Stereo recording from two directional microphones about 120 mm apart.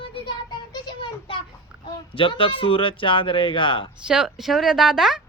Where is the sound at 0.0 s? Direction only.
40° left (ahead or behind).